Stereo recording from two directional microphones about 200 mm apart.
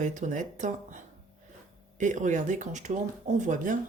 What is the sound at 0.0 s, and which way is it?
Speech, 40° right (ahead or behind).